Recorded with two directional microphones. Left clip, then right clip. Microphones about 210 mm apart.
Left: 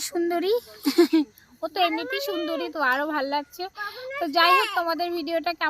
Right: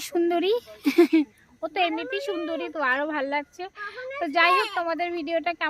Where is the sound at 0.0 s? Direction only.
55° right (ahead or behind).